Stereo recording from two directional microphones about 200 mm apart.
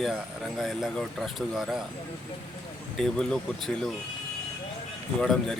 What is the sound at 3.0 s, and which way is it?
Speech, 5° left (ahead or behind).